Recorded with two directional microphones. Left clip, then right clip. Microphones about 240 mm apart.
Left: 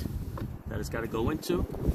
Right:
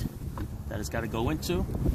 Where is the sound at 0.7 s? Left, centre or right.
Right.